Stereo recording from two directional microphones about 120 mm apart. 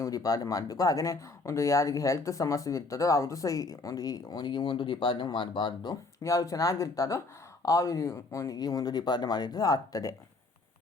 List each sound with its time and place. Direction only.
0.0 s speech: 30° left (ahead or behind)